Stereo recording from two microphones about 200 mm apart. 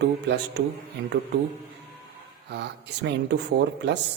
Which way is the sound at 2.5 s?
60° right (ahead or behind).